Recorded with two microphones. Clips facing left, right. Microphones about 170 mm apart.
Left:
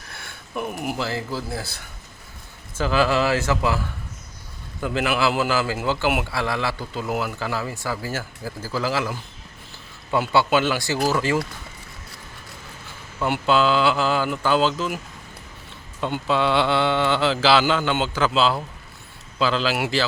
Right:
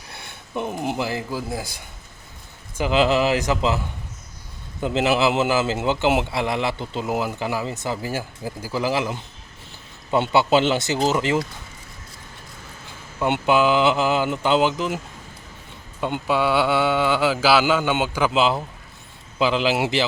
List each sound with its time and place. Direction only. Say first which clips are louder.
0.1 s a sound: right 2 dB; 20° right (ahead or behind)
0.9 s speech: right 1 dB; 15° right (ahead or behind)
4.8 s a man's voice: right 3 dB; 20° right (ahead or behind)
13.1 s a man's voice: right 1 dB; 20° right (ahead or behind)